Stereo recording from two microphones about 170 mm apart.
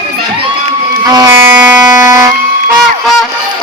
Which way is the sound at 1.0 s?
20° right (ahead or behind).